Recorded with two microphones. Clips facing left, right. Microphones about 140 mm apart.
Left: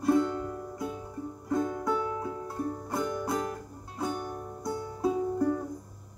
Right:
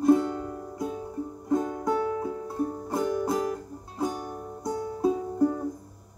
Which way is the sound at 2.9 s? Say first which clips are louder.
Right 4 dB; 10° right (ahead or behind).